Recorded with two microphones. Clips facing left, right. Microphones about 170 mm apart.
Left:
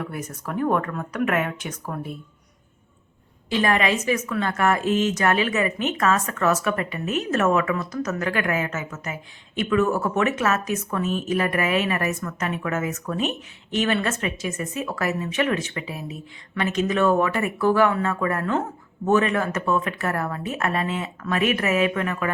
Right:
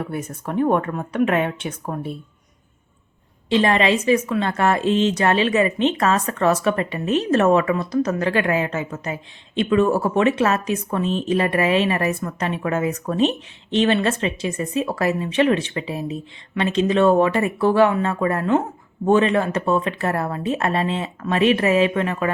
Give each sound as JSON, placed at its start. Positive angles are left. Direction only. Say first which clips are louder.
{"t": 0.0, "sound": "a woman's voice", "louder": "right 4 dB", "side_deg": -30}
{"t": 3.5, "sound": "a woman's voice", "louder": "right 4 dB", "side_deg": -30}